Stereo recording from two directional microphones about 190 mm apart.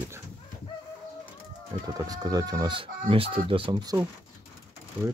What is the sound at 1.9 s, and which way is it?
Speech, 20° right (ahead or behind).